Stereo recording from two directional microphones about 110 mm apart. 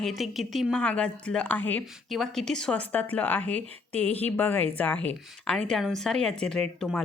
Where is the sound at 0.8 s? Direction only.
10° left (ahead or behind).